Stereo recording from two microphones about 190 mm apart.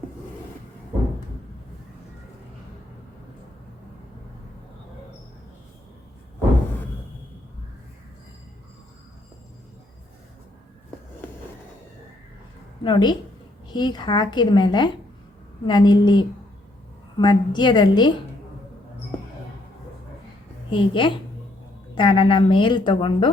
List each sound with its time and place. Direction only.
12.8 s a woman's voice: 25° left (ahead or behind)
20.7 s a woman's voice: 25° left (ahead or behind)